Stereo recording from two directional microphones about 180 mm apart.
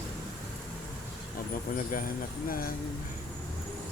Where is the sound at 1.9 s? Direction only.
50° left (ahead or behind).